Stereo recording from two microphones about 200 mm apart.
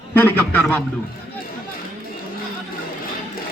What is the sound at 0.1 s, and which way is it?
Speech, 10° left (ahead or behind).